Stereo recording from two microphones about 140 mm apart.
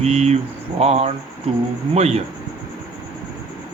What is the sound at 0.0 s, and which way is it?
Speech, 50° right (ahead or behind).